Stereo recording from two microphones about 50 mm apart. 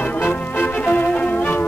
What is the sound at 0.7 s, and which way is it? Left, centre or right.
Music, left.